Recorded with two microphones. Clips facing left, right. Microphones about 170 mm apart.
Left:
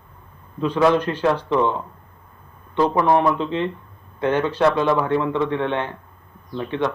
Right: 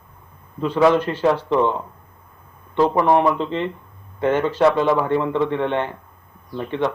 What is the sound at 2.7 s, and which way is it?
Speech, 15° right (ahead or behind).